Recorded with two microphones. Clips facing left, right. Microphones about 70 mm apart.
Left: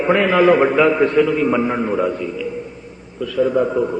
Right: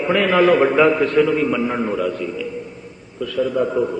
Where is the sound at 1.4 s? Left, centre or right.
Left.